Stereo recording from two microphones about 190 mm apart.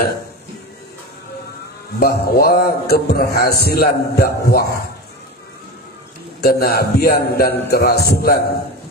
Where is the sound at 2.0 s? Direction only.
55° left (ahead or behind).